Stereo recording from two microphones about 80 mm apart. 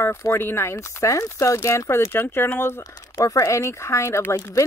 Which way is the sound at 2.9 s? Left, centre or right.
Left.